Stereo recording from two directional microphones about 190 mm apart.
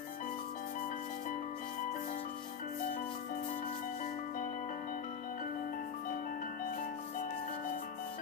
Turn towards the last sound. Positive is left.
turn(degrees=45)  # may be behind; listen again after turning